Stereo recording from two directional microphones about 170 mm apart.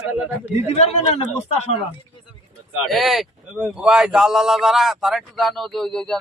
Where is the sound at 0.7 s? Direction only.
40° left (ahead or behind).